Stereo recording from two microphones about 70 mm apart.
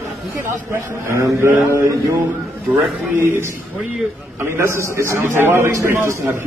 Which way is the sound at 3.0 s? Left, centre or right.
Right.